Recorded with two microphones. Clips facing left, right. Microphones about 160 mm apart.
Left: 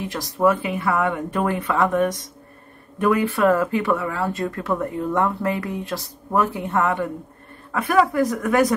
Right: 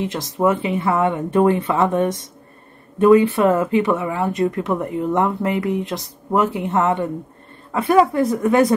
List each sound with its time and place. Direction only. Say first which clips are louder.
0.0 s speech: right 1 dB; 25° right (ahead or behind)